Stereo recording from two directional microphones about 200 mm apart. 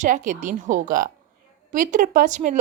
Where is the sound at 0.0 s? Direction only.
40° right (ahead or behind).